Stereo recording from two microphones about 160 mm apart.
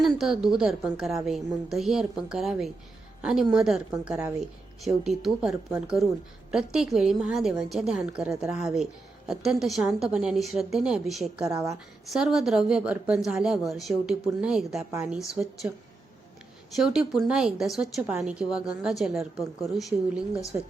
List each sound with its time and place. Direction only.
0.0 s a woman's voice: centre (ahead or behind)
16.7 s a woman's voice: 5° right (ahead or behind)